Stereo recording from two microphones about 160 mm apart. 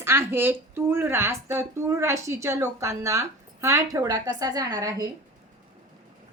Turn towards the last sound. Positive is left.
turn(degrees=-25)  # may be behind; listen again after turning